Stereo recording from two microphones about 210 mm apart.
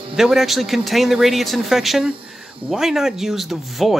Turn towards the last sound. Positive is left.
turn(degrees=0)  # may be behind; listen again after turning